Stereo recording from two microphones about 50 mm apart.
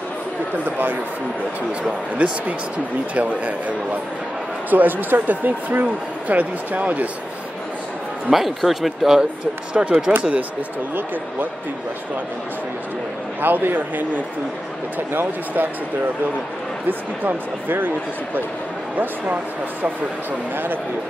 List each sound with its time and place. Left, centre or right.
0.7 s speech: right
1.8 s a man's voice: right
8.3 s speech: centre
9.8 s a man's voice: centre
13.4 s speech: right
17.2 s speech: right
20.5 s speech: right